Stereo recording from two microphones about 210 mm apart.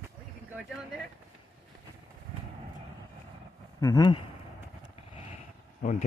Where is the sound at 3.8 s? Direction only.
20° left (ahead or behind).